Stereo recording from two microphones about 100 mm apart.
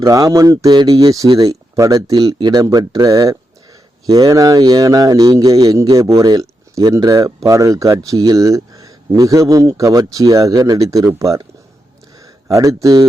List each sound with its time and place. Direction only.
0.0 s speech: 35° right (ahead or behind)
12.5 s speech: 35° right (ahead or behind)